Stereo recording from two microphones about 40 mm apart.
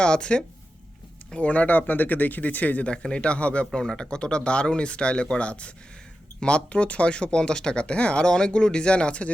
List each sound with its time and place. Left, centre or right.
0.0 s speech: left
2.8 s speech: left